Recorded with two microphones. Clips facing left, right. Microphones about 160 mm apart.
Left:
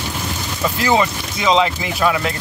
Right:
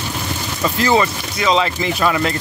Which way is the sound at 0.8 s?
15° left (ahead or behind).